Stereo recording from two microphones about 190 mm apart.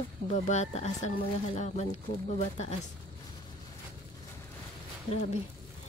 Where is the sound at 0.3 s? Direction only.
40° left (ahead or behind).